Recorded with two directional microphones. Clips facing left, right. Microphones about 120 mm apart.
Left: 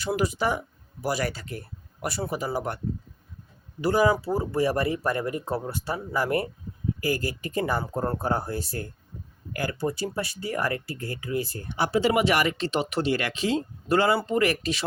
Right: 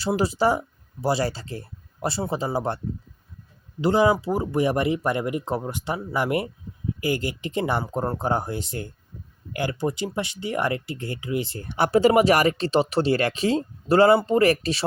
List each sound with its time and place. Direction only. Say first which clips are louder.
0.0 s speech: right 4 dB; 30° right (ahead or behind)
11.7 s speech: right 5 dB; 50° right (ahead or behind); by 14.8 s 35° right (ahead or behind)